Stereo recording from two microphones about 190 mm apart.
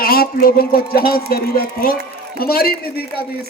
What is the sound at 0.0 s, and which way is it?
A man's voice, 50° left (ahead or behind).